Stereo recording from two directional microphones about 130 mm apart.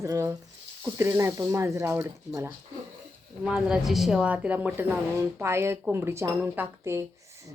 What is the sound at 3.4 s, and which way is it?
Speech, 5° right (ahead or behind).